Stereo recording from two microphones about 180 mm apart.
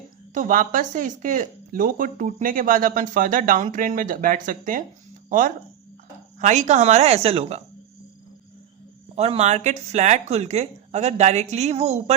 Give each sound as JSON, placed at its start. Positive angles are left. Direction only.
{"t": 0.3, "sound": "a woman's voice", "side_deg": -45}
{"t": 9.1, "sound": "a woman's voice", "side_deg": -35}